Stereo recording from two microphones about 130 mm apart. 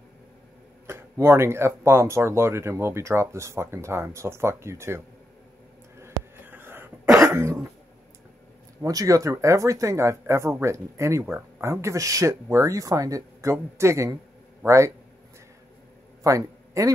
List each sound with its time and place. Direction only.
0.8 s speech: 20° right (ahead or behind)
5.9 s cough: 20° right (ahead or behind)
8.8 s speech: 25° right (ahead or behind)
16.3 s speech: 25° right (ahead or behind)